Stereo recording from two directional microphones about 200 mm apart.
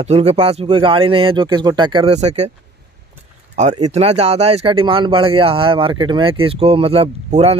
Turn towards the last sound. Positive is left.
turn(degrees=-30)  # may be behind; listen again after turning